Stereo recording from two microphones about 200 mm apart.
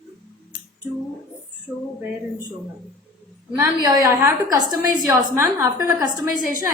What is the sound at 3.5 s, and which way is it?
A woman's voice, 15° right (ahead or behind).